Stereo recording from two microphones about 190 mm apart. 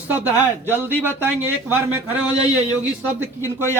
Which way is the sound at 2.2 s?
20° left (ahead or behind).